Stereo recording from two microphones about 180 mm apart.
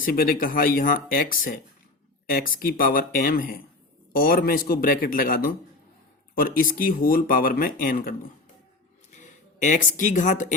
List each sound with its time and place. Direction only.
0.0 s speech: 55° left (ahead or behind)